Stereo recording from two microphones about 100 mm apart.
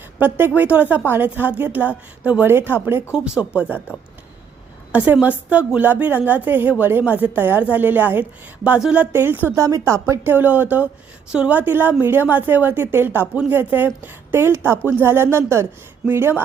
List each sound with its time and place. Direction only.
0.2 s speech: 20° right (ahead or behind)
4.9 s speech: 15° right (ahead or behind)
9.6 s speech: 30° right (ahead or behind)